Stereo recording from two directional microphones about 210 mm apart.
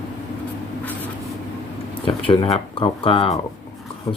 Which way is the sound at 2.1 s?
25° left (ahead or behind).